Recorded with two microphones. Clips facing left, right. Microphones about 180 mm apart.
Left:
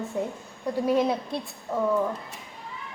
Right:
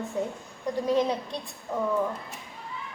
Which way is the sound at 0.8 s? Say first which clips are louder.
Left 2 dB; 10° left (ahead or behind).